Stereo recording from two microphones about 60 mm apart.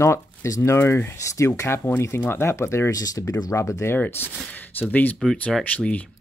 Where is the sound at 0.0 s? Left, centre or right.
Left.